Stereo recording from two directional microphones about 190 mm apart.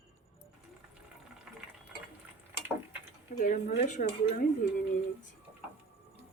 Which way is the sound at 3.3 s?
40° left (ahead or behind).